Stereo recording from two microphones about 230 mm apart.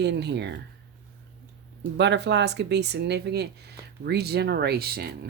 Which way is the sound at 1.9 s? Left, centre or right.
Right.